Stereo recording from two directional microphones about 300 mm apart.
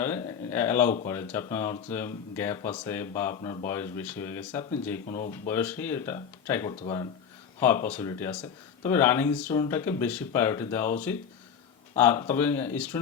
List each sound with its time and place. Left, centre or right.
0.0 s speech: centre
5.0 s speech: left
5.3 s speech: centre
11.9 s speech: centre